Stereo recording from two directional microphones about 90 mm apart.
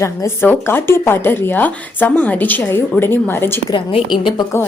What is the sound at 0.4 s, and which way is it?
Speech, 20° left (ahead or behind).